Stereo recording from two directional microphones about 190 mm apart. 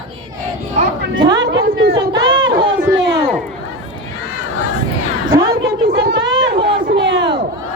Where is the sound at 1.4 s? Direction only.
65° right (ahead or behind).